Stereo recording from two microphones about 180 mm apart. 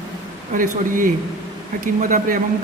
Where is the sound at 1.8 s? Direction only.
50° right (ahead or behind).